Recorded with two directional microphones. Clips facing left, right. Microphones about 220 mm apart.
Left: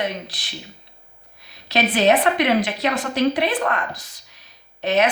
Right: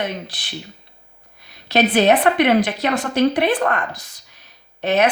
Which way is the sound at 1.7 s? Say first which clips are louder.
Right 3 dB; 55° right (ahead or behind).